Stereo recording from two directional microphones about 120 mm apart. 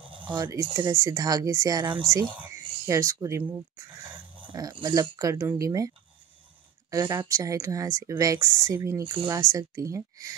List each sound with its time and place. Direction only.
0.2 s a sound: 40° right (ahead or behind)
0.5 s speech: 25° right (ahead or behind)
2.0 s speech: 25° right (ahead or behind)
4.4 s speech: 35° right (ahead or behind)
7.1 s speech: 25° right (ahead or behind)
9.0 s speech: 40° right (ahead or behind)
9.3 s speech: 25° right (ahead or behind)